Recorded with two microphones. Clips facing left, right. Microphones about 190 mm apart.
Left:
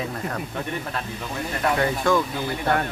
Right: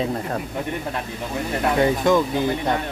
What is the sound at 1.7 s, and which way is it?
Speech, 20° right (ahead or behind).